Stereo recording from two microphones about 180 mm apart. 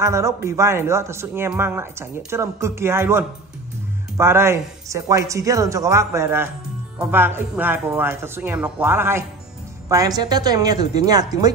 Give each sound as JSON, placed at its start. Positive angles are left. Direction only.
{"t": 0.0, "sound": "a man's voice", "side_deg": -15}